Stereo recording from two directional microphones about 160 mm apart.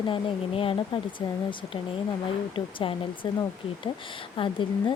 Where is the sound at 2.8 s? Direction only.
35° left (ahead or behind).